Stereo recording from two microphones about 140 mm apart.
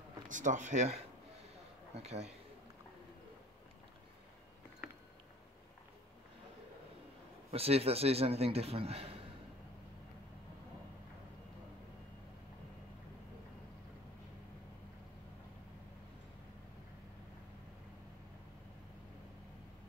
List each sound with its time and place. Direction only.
0.3 s speech: 65° right (ahead or behind)
2.0 s a man's voice: 50° right (ahead or behind)
7.5 s a man's voice: 45° right (ahead or behind)